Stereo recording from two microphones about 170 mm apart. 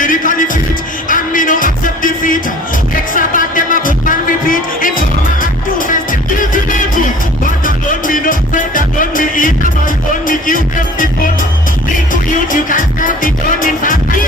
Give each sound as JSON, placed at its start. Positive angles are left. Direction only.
{"t": 0.0, "sound": "music", "side_deg": 50}
{"t": 12.1, "sound": "music", "side_deg": 50}